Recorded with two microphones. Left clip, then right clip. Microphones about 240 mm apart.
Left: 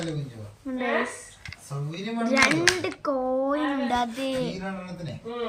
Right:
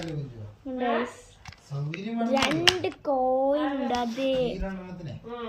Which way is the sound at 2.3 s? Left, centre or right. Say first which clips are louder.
Left 2 dB; centre.